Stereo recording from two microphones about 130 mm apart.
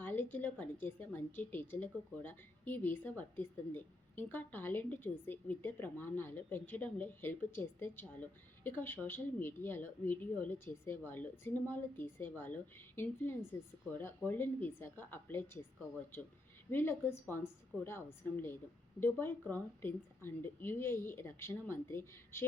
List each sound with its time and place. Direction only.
0.0 s a woman's voice: 15° left (ahead or behind)
16.7 s a woman's voice: 15° left (ahead or behind)